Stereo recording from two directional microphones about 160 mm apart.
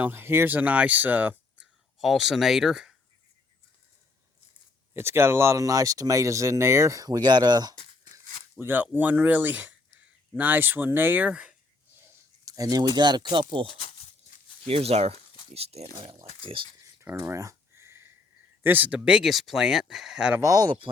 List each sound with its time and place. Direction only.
0.0 s speech: 15° right (ahead or behind)
4.9 s speech: 15° right (ahead or behind)
8.5 s speech: 10° right (ahead or behind)
12.5 s speech: 25° right (ahead or behind)
16.8 s a sound: 15° right (ahead or behind)
18.6 s speech: 10° right (ahead or behind)
20.4 s speech: 20° right (ahead or behind)